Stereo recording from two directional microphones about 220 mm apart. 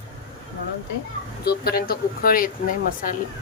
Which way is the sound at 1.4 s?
45° left (ahead or behind).